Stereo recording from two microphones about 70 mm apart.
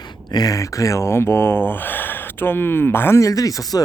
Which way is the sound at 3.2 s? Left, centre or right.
Left.